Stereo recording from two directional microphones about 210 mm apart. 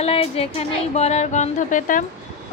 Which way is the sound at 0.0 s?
30° left (ahead or behind).